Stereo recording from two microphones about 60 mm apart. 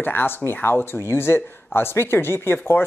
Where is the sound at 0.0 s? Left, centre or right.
Left.